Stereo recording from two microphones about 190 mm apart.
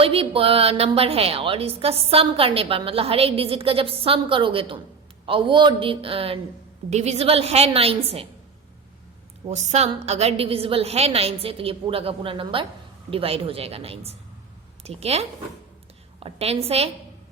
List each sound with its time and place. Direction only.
0.0 s a woman's voice: 30° right (ahead or behind)
9.5 s a woman's voice: 35° right (ahead or behind)